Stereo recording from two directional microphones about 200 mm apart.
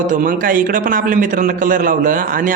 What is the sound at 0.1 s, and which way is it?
A man's voice, 40° right (ahead or behind).